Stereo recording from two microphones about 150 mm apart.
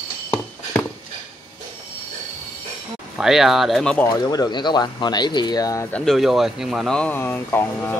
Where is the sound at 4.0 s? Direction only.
25° left (ahead or behind).